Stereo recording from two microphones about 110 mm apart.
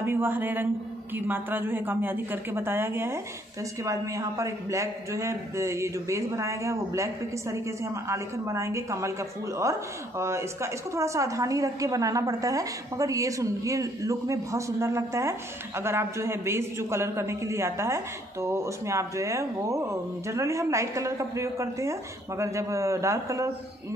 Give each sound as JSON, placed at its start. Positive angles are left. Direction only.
{"t": 0.0, "sound": "a woman's voice", "side_deg": -20}